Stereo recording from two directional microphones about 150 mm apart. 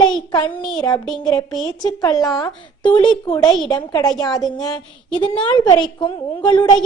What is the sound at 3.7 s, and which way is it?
A woman's voice, 25° left (ahead or behind).